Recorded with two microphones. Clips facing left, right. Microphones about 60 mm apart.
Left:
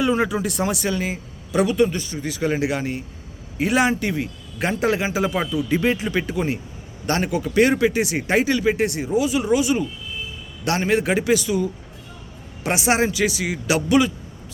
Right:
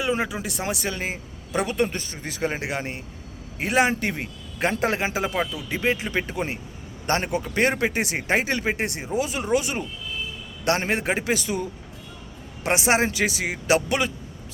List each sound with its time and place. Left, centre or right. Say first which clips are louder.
0.0 s speech: left 5 dB; centre
5.3 s speech: left 2 dB; centre
5.7 s speech: left 3 dB; right
12.6 s speech: left 1 dB; right